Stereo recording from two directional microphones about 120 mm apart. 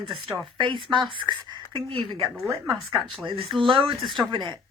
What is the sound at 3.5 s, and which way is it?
Speech, 45° right (ahead or behind).